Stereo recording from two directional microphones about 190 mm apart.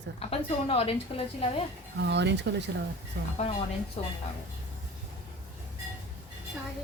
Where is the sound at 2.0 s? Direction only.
65° right (ahead or behind).